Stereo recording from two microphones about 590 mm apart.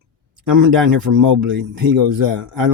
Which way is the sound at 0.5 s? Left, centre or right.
Right.